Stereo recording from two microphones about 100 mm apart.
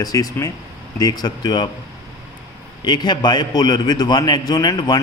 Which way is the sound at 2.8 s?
45° left (ahead or behind).